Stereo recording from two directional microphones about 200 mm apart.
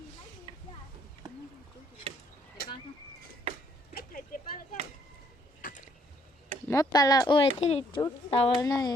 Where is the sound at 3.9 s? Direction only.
45° left (ahead or behind).